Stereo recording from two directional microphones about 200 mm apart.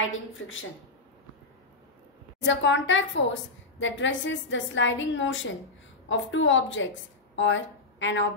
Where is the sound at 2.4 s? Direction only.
65° left (ahead or behind).